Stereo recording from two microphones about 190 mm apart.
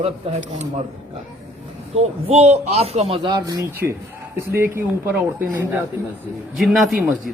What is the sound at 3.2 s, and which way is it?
Speech, 25° right (ahead or behind).